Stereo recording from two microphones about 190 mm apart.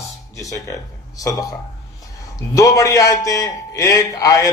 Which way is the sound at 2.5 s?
15° left (ahead or behind).